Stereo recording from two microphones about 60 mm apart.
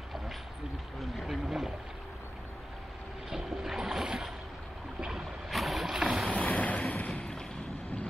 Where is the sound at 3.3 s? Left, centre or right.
Centre.